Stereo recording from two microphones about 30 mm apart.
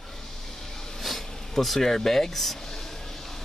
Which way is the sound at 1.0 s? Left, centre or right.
Centre.